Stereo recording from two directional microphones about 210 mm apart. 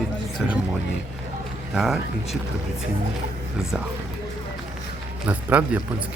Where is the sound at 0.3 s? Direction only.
5° right (ahead or behind).